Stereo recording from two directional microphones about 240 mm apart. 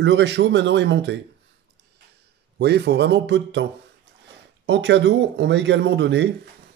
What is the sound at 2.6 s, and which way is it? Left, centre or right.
Speech, right.